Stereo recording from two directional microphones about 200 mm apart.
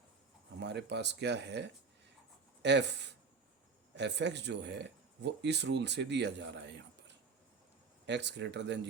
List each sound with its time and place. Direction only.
0.6 s speech: 60° right (ahead or behind)